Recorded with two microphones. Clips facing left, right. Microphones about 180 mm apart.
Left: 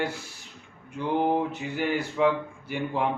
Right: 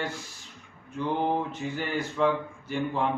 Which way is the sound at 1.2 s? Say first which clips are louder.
Left 2 dB; 10° left (ahead or behind).